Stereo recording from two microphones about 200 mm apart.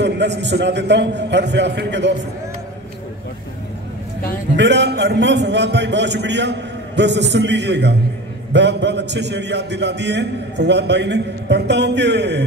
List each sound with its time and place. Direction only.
0.0 s a man's voice: 60° right (ahead or behind)
4.6 s a man's voice: 60° right (ahead or behind)